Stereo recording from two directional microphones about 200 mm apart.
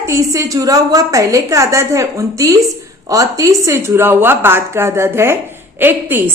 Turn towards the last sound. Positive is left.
turn(degrees=-10)  # may be behind; listen again after turning